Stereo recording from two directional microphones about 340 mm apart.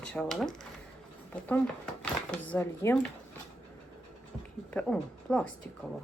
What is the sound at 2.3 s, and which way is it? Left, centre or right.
Speech, centre.